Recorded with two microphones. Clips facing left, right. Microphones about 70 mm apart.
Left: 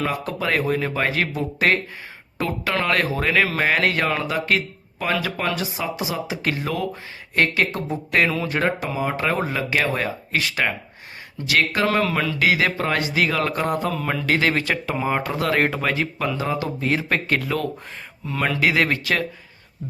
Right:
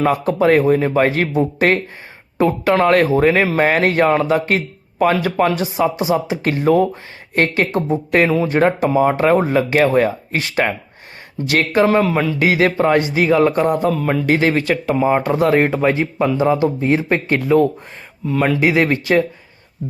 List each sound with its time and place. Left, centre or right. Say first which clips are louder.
0.0 s a man's voice: right 10 dB; right
11.9 s speech: right 6 dB; centre
12.4 s a man's voice: right 5 dB; right
13.1 s speech: right 8 dB; centre
14.3 s speech: right 4 dB; right
14.5 s speech: right 6 dB; centre
15.4 s speech: right 7 dB; centre
18.3 s speech: right 7 dB; centre
18.6 s speech: right 5 dB; centre